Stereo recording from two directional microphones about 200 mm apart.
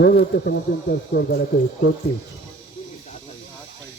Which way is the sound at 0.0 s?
55° left (ahead or behind).